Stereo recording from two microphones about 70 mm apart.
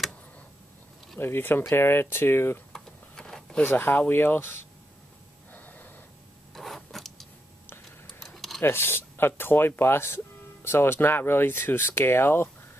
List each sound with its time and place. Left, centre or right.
1.2 s speech: left
2.7 s a sound: centre
3.6 s speech: left
5.5 s snort: left
6.5 s a sound: centre
8.2 s computer keyboard: centre
8.6 s speech: left